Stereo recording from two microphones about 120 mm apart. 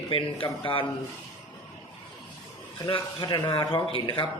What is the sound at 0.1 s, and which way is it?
Speech, 45° left (ahead or behind).